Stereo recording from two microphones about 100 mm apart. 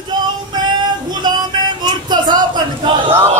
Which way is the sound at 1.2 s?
45° right (ahead or behind).